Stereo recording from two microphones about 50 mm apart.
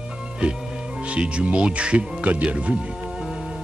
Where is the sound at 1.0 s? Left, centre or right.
Right.